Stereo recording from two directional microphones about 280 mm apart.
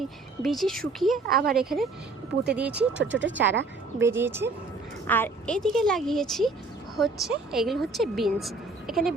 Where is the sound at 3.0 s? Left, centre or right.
Right.